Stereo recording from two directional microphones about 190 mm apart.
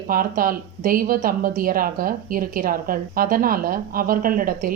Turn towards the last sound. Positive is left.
turn(degrees=-50)  # may be behind; listen again after turning